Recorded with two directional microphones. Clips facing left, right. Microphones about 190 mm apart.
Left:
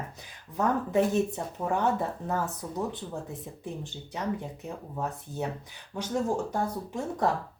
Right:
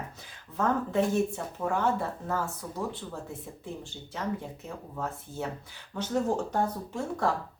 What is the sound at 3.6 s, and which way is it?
Speech, 20° left (ahead or behind).